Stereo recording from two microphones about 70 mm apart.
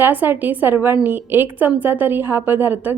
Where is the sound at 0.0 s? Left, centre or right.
Right.